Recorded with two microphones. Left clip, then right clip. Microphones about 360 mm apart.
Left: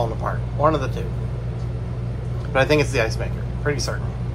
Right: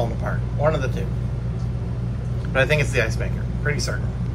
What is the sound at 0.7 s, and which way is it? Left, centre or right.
Speech, left.